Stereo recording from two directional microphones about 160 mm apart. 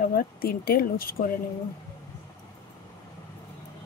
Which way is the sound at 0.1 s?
65° left (ahead or behind).